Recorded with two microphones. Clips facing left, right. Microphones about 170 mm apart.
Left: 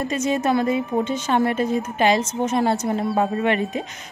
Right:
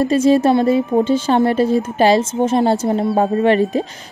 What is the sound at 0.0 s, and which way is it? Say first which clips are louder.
A woman's voice: right 9 dB; 30° right (ahead or behind).